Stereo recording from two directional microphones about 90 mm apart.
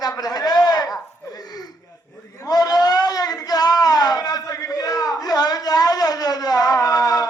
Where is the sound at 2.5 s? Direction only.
45° left (ahead or behind).